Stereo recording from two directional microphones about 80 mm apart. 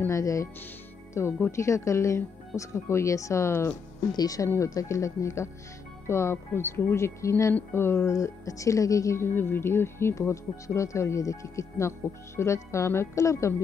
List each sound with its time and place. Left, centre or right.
0.1 s a woman's voice: left
4.1 s a woman's voice: left